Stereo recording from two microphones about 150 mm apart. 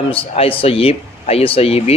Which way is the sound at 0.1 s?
40° left (ahead or behind).